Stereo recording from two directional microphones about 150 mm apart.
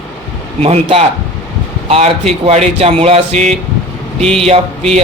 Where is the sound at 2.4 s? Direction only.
45° right (ahead or behind).